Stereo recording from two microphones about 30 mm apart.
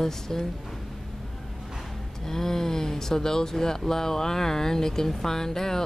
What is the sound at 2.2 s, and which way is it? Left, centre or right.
Speech, centre.